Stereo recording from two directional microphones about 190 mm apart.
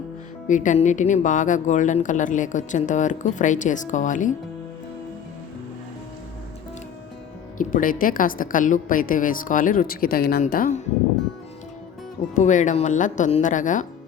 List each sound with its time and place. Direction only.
0.4 s speech: 40° left (ahead or behind)
7.6 s a woman's voice: 45° left (ahead or behind)
12.4 s speech: 40° left (ahead or behind)